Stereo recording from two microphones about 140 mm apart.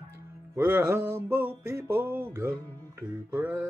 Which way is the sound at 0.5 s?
15° right (ahead or behind).